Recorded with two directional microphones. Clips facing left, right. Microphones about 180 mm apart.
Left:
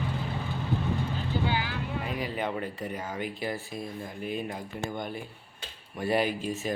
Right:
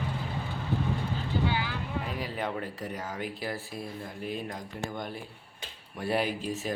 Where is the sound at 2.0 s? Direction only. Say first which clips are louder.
Left 2 dB; centre (ahead or behind).